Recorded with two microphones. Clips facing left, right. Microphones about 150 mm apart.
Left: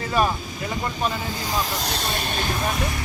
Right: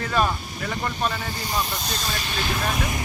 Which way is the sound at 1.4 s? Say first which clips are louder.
Left 1 dB; 90° left.